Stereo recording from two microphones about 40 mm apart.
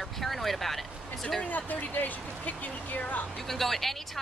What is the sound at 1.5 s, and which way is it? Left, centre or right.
Speech, left.